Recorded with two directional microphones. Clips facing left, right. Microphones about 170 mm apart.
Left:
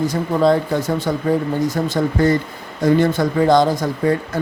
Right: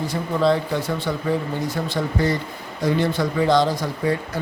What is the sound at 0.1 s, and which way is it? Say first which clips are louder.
Speech: even; 45° left (ahead or behind).